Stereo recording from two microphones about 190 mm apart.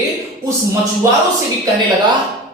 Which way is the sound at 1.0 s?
15° right (ahead or behind).